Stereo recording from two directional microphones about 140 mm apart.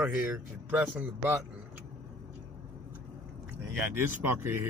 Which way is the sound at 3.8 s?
15° right (ahead or behind).